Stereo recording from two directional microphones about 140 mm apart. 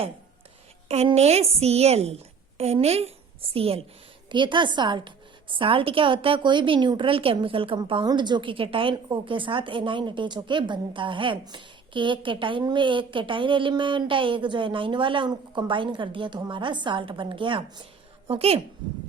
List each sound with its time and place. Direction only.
1.1 s a woman's voice: 50° right (ahead or behind)